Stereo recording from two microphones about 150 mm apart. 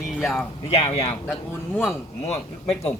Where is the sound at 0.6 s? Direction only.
45° left (ahead or behind).